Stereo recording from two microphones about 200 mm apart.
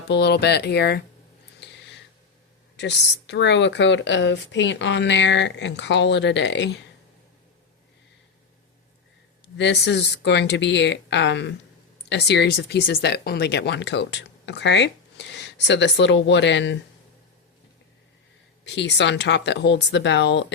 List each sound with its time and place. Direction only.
0.1 s speech: 55° left (ahead or behind)
1.6 s a sound: 60° left (ahead or behind)
2.7 s speech: 60° left (ahead or behind)
9.6 s speech: 60° left (ahead or behind)
18.6 s speech: 60° left (ahead or behind)